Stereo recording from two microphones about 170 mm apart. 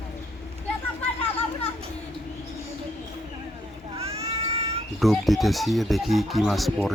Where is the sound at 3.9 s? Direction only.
35° right (ahead or behind).